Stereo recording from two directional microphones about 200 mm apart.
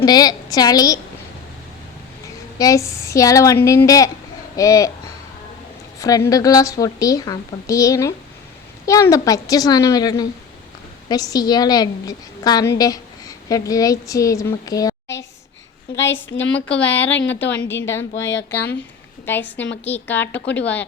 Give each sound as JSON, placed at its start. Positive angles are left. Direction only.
{"t": 0.0, "sound": "a woman's voice", "side_deg": 20}
{"t": 2.6, "sound": "a woman's voice", "side_deg": 15}
{"t": 6.0, "sound": "a woman's voice", "side_deg": 15}
{"t": 16.6, "sound": "a woman's voice", "side_deg": 5}
{"t": 17.1, "sound": "a woman's voice", "side_deg": 65}
{"t": 19.2, "sound": "a woman's voice", "side_deg": 10}